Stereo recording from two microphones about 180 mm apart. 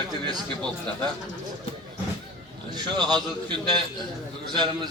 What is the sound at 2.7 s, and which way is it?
Speech, 25° right (ahead or behind).